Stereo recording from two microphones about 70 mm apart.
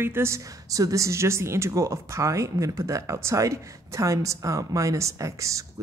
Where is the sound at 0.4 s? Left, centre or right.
Right.